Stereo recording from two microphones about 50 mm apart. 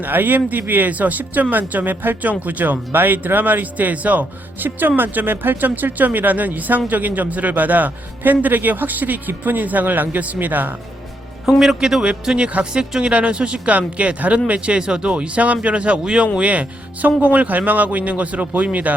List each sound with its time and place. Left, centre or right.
0.0 s speech: right
11.6 s speech: centre
13.0 s speech: right